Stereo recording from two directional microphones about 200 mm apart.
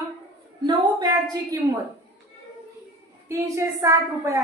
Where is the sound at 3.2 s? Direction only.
15° right (ahead or behind).